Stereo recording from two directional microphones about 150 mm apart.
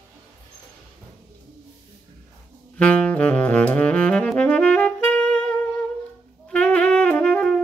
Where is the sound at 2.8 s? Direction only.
10° left (ahead or behind).